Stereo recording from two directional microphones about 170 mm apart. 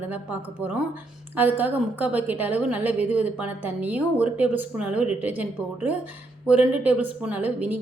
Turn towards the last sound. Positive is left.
turn(degrees=-10)  # may be behind; listen again after turning